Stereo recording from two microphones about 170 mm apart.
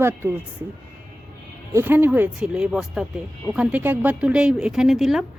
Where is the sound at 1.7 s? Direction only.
15° right (ahead or behind).